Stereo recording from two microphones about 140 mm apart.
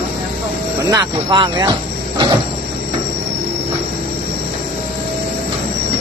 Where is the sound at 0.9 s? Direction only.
30° right (ahead or behind).